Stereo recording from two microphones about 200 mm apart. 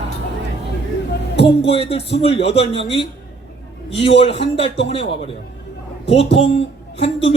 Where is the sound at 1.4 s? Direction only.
30° left (ahead or behind).